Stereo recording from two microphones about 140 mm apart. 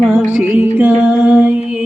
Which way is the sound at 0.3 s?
10° right (ahead or behind).